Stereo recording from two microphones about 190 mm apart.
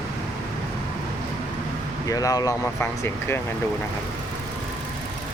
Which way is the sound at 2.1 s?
20° left (ahead or behind).